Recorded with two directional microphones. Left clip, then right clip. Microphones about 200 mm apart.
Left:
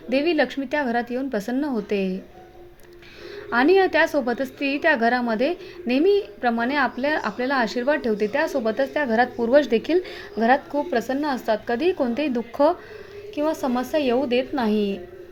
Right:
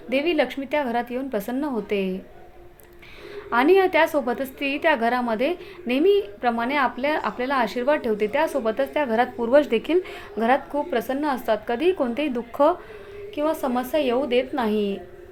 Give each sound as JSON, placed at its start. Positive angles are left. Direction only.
{"t": 0.1, "sound": "a woman's voice", "side_deg": 20}
{"t": 3.3, "sound": "a woman's voice", "side_deg": 20}